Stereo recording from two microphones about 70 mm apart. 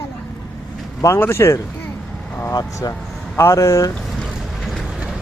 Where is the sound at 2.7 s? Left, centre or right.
Left.